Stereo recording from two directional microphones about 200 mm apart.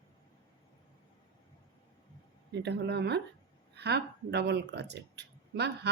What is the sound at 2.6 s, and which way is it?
Speech, 60° right (ahead or behind).